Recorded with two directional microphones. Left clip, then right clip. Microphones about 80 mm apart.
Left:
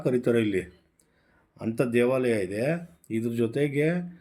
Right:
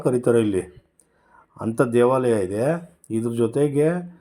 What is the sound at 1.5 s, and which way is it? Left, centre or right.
Speech, right.